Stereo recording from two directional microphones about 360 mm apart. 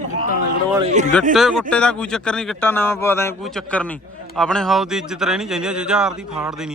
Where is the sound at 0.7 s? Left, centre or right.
Centre.